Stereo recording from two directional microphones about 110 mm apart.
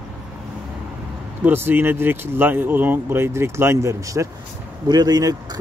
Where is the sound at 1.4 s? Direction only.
20° right (ahead or behind).